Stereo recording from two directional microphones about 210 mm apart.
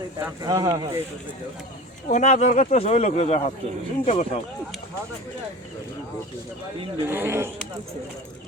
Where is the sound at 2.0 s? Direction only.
35° left (ahead or behind).